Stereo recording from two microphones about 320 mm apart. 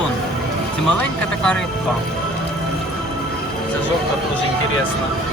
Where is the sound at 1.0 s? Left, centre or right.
Centre.